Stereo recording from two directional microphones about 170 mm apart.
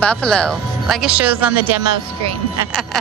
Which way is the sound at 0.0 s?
5° left (ahead or behind).